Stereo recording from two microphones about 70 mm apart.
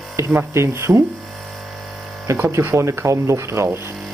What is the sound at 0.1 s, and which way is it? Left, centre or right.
Speech, right.